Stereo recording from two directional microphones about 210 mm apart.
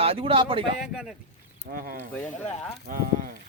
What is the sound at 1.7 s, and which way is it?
Speech, 40° right (ahead or behind).